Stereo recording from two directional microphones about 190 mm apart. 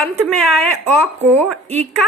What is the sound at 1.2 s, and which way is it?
Speech, 35° right (ahead or behind).